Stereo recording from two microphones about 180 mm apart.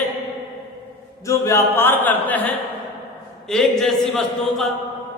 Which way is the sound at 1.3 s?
15° left (ahead or behind).